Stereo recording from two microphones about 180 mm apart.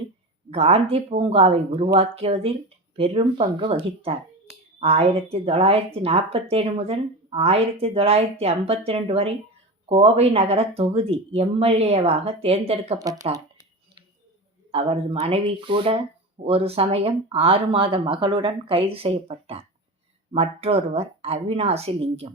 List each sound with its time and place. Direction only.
0.5 s speech: 35° right (ahead or behind)
14.7 s speech: 30° right (ahead or behind)